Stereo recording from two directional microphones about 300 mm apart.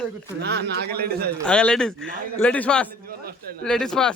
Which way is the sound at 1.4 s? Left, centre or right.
Centre.